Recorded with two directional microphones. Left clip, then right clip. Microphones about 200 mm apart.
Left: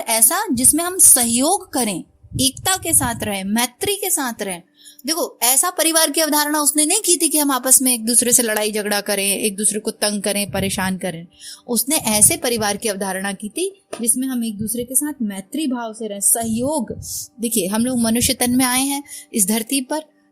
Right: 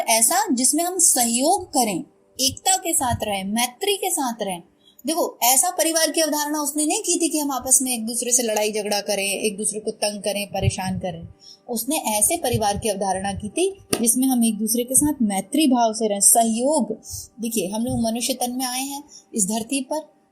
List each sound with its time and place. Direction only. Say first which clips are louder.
0.0 s a woman's voice: right 1 dB; 35° left (ahead or behind)
14.0 s a woman's voice: right 2 dB; 20° left (ahead or behind)
17.4 s a woman's voice: left 4 dB; 40° left (ahead or behind)